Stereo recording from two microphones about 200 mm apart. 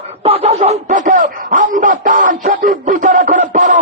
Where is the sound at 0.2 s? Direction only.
30° right (ahead or behind).